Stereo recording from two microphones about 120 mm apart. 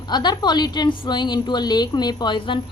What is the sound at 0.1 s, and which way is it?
Speech, 35° left (ahead or behind).